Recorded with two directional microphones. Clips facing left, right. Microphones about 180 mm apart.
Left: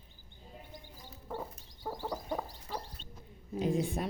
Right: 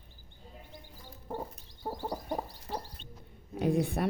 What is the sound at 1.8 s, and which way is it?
Fowl, 30° right (ahead or behind).